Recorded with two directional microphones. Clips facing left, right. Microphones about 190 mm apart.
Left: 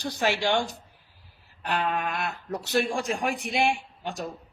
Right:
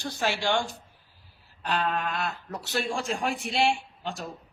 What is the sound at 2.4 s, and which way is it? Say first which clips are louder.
A woman's voice: left 4 dB; 20° left (ahead or behind).